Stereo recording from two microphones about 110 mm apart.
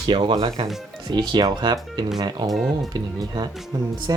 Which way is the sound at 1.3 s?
40° right (ahead or behind).